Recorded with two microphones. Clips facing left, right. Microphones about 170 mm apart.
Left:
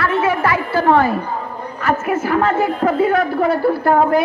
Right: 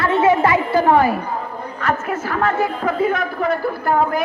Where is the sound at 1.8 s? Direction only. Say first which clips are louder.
Left 4 dB; 10° left (ahead or behind).